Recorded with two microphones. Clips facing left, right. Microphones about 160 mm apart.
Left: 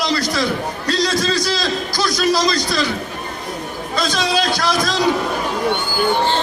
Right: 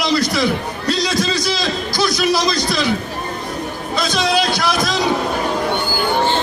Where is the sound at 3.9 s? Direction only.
15° right (ahead or behind).